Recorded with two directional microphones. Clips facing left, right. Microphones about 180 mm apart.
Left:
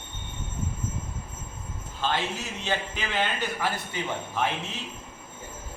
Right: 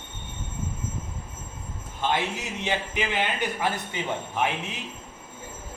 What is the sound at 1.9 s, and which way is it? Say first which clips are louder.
A man's voice: right 2 dB; 15° right (ahead or behind).